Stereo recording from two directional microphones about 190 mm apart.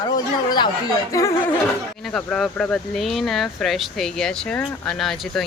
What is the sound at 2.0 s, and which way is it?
Speech, 5° left (ahead or behind).